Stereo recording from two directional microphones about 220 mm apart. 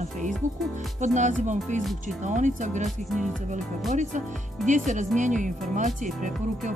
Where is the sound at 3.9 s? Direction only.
35° right (ahead or behind).